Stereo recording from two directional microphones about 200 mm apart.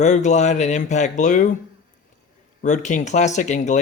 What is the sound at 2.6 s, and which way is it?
A man's voice, 35° left (ahead or behind).